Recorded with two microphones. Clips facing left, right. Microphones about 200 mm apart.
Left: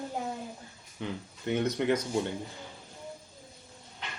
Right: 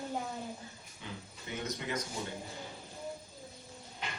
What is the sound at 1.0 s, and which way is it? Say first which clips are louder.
Speech: left 11 dB; 65° left (ahead or behind).